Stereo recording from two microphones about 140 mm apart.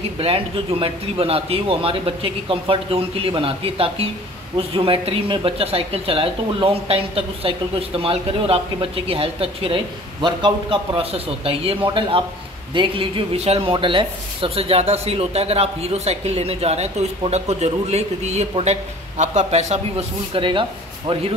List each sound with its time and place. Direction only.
0.2 s a man's voice: 45° right (ahead or behind)